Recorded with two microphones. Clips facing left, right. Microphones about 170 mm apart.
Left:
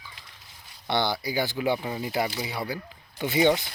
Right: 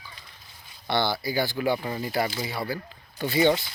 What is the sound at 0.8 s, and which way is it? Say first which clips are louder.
Speech: right 1 dB; 20° left (ahead or behind).